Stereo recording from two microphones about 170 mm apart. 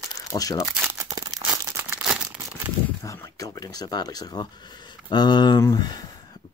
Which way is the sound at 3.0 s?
20° left (ahead or behind).